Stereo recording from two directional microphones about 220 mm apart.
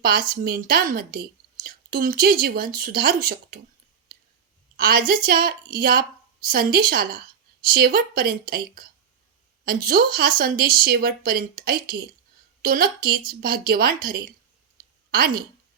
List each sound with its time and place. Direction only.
0.0 s a woman's voice: 40° right (ahead or behind)
4.8 s a woman's voice: 40° right (ahead or behind)